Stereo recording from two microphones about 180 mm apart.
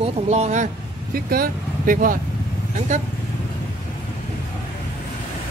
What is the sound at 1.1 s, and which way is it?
Speech, 55° right (ahead or behind).